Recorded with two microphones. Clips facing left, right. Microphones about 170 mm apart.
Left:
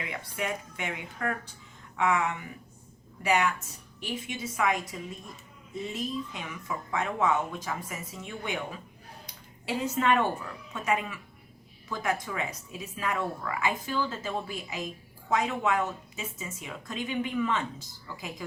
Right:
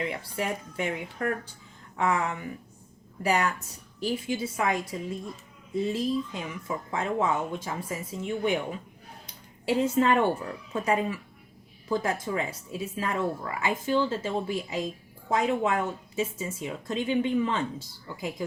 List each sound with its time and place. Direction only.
0.0 s speech: 30° right (ahead or behind)
9.2 s a sound: 25° right (ahead or behind)
10.7 s speech: 35° right (ahead or behind)